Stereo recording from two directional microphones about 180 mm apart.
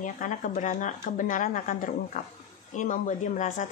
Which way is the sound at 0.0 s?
45° left (ahead or behind).